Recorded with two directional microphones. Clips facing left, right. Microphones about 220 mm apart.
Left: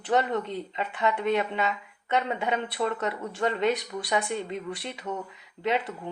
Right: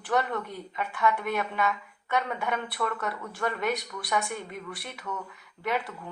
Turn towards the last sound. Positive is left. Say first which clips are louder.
# left 3 dB
turn(degrees=25)  # may be behind; listen again after turning